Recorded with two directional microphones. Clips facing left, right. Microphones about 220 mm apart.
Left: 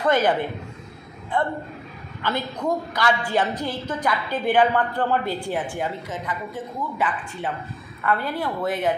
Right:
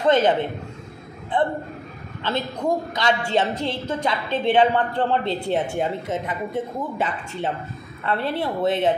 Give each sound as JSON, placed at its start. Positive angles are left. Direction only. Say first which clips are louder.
{"t": 0.0, "sound": "a woman's voice", "louder": "right 2 dB", "side_deg": -25}